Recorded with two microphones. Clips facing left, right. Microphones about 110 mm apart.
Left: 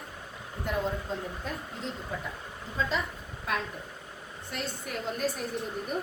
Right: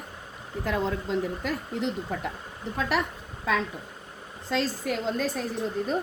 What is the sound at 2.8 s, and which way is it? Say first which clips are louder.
Speech: right 4 dB; 70° right (ahead or behind).